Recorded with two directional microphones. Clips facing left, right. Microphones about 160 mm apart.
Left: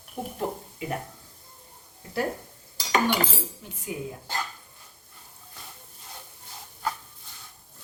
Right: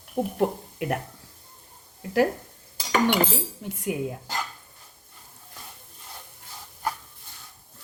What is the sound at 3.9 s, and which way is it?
Speech, 70° right (ahead or behind).